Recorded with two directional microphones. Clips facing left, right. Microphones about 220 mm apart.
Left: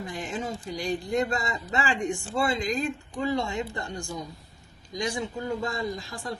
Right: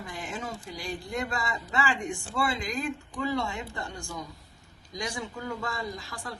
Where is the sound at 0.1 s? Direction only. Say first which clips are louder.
Left 3 dB; 20° left (ahead or behind).